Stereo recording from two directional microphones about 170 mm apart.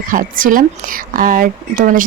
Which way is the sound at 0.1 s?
55° right (ahead or behind).